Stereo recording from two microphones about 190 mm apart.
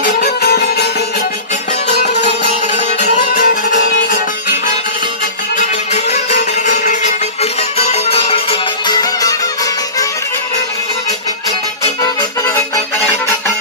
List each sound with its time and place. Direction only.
0.0 s music: 55° left (ahead or behind)
3.3 s music: 45° left (ahead or behind)
5.6 s music: 35° left (ahead or behind); by 9.4 s 20° left (ahead or behind)
11.8 s music: 20° left (ahead or behind)